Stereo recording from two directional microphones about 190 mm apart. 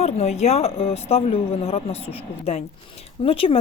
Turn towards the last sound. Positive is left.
turn(degrees=30)  # may be behind; listen again after turning